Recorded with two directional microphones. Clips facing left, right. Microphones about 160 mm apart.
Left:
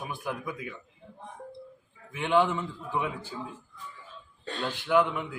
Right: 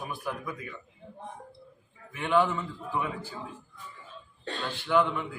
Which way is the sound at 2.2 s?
20° left (ahead or behind).